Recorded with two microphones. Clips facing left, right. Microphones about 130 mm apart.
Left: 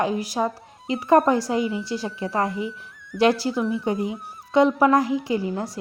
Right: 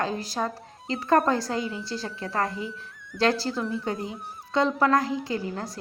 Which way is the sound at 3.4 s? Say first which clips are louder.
Left 5 dB; 10° left (ahead or behind).